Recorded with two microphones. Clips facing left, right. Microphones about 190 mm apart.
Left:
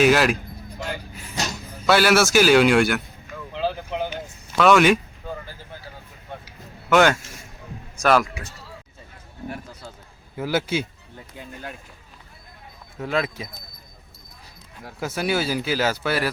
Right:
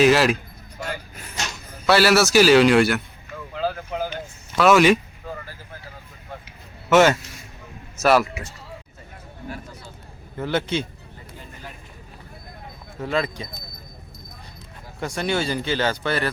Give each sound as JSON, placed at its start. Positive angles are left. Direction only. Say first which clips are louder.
{"t": 0.0, "sound": "speech", "louder": "right 1 dB", "side_deg": 0}
{"t": 1.9, "sound": "speech", "louder": "right 1 dB", "side_deg": 0}
{"t": 3.5, "sound": "a sound", "louder": "even", "side_deg": 20}
{"t": 4.5, "sound": "speech", "louder": "right 1 dB", "side_deg": 0}
{"t": 6.9, "sound": "speech", "louder": "right 2 dB", "side_deg": 0}
{"t": 10.3, "sound": "speech", "louder": "even", "side_deg": 5}
{"t": 13.0, "sound": "speech", "louder": "even", "side_deg": 0}
{"t": 14.9, "sound": "speech", "louder": "even", "side_deg": 5}